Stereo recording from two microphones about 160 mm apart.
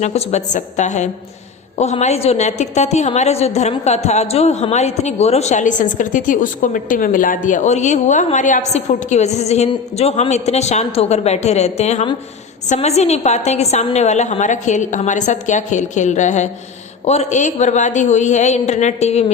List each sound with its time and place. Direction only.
0.0 s a woman's voice: 45° left (ahead or behind)